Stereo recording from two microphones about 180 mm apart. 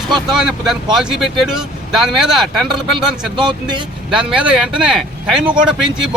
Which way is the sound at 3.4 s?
25° right (ahead or behind).